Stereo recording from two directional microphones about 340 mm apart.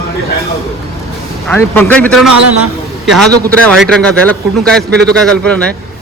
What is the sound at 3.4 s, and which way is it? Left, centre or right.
A man's voice, centre.